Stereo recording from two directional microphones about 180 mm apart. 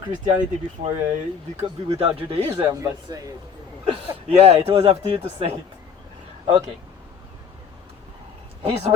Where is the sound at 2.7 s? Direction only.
20° right (ahead or behind).